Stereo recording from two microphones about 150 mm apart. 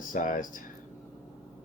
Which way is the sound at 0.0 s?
60° left (ahead or behind).